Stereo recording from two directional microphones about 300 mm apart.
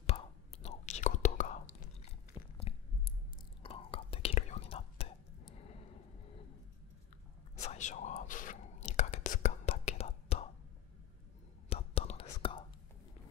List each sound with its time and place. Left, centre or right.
0.0 s whispering: centre
2.0 s a sound: centre
3.6 s whispering: centre
7.6 s whispering: left
11.7 s whispering: centre